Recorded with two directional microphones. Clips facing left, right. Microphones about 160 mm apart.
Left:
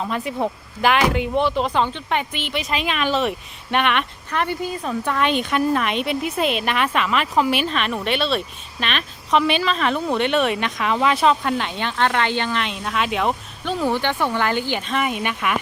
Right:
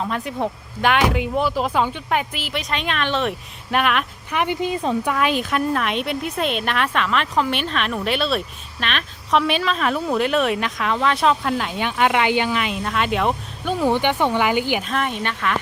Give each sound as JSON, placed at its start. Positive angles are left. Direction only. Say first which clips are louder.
{"t": 0.0, "sound": "speech", "louder": "left 1 dB", "side_deg": 0}
{"t": 4.4, "sound": "speech", "louder": "right 2 dB", "side_deg": -20}
{"t": 5.0, "sound": "speech", "louder": "even", "side_deg": -5}
{"t": 14.8, "sound": "speech", "louder": "left 1 dB", "side_deg": 5}